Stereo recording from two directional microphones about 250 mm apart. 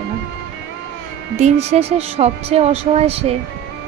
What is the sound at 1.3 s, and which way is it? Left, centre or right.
A woman's voice, right.